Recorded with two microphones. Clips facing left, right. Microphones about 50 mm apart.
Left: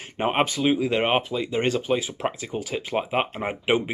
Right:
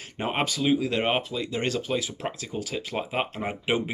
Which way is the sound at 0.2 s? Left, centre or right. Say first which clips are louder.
Left 4 dB; left.